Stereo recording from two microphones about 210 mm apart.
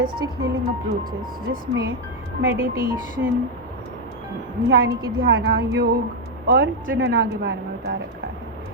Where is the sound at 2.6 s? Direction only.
45° right (ahead or behind).